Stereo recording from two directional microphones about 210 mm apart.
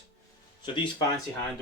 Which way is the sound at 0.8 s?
20° left (ahead or behind).